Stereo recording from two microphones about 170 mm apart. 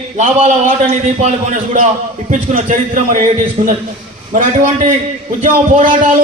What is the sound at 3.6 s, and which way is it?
Speech, 35° right (ahead or behind).